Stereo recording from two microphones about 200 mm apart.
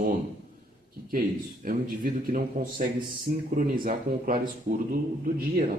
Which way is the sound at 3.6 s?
45° right (ahead or behind).